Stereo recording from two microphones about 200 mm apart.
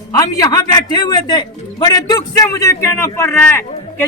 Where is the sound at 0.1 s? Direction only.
20° left (ahead or behind).